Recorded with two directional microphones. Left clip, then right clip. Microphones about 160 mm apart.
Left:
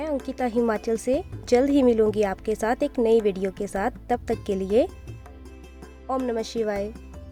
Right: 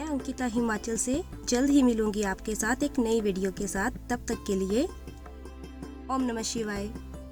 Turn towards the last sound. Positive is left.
turn(degrees=30)  # may be behind; listen again after turning